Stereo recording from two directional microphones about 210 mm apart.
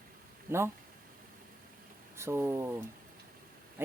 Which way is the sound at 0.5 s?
10° right (ahead or behind).